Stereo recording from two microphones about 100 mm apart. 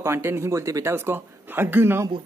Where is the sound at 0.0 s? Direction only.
25° right (ahead or behind).